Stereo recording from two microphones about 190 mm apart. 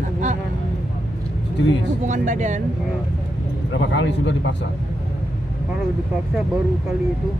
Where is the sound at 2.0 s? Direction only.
40° right (ahead or behind).